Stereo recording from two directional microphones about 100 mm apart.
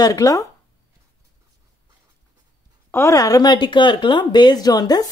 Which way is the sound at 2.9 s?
30° left (ahead or behind).